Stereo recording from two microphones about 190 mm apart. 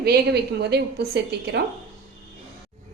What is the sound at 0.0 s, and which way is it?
A woman's voice, 55° right (ahead or behind).